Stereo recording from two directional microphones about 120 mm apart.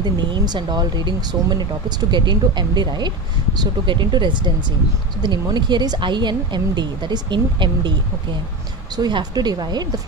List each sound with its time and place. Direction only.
0.0 s a woman's voice: 40° right (ahead or behind)
8.9 s a woman's voice: 35° right (ahead or behind)